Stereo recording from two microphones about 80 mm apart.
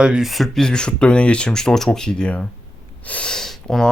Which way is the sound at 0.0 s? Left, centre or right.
Centre.